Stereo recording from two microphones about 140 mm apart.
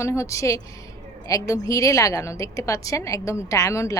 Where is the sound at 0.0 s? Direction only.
20° left (ahead or behind).